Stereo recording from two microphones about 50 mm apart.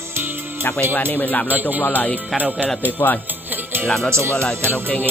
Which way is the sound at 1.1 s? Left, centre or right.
Left.